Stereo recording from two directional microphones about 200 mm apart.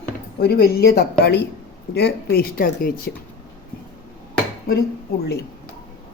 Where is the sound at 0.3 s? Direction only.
50° left (ahead or behind).